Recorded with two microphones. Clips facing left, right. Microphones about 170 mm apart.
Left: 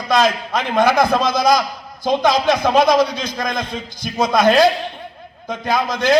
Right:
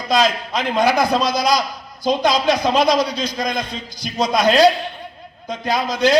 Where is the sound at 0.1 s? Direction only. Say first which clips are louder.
Left 1 dB; 55° left (ahead or behind).